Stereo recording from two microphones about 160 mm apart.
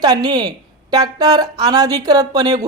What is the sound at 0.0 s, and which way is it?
A woman's voice, 25° right (ahead or behind).